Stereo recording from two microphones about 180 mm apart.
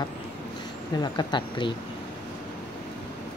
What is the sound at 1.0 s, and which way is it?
Speech, 25° left (ahead or behind).